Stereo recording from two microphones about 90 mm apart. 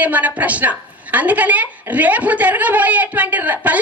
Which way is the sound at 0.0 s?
15° right (ahead or behind).